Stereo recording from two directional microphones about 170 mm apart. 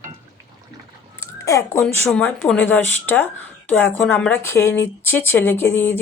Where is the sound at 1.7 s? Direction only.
5° left (ahead or behind).